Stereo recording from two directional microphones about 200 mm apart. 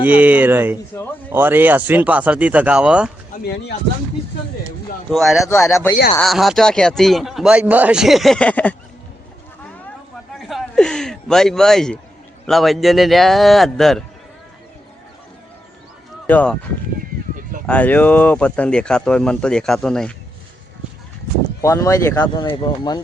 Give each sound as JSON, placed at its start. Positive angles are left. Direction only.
{"t": 0.0, "sound": "speech", "side_deg": -5}
{"t": 5.1, "sound": "speech", "side_deg": 0}
{"t": 5.5, "sound": "speech", "side_deg": 15}
{"t": 6.1, "sound": "speech", "side_deg": 0}
{"t": 10.3, "sound": "a sound", "side_deg": 0}
{"t": 12.5, "sound": "speech", "side_deg": 0}
{"t": 16.2, "sound": "speech", "side_deg": 5}
{"t": 17.7, "sound": "speech", "side_deg": 5}
{"t": 21.6, "sound": "speech", "side_deg": 15}